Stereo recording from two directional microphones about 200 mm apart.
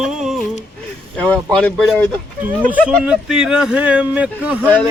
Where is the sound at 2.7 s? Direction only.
5° right (ahead or behind).